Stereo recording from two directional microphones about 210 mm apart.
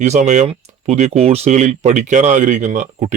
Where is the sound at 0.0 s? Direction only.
35° right (ahead or behind).